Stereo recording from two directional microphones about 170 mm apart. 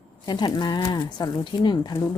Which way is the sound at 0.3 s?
25° left (ahead or behind).